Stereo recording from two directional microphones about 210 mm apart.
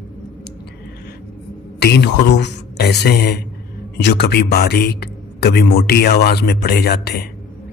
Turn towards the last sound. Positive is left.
turn(degrees=50)  # may be behind; listen again after turning